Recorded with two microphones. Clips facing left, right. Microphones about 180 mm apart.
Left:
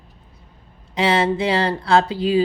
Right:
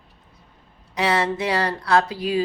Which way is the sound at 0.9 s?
25° left (ahead or behind).